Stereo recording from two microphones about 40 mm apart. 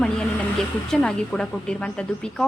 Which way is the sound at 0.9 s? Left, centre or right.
Centre.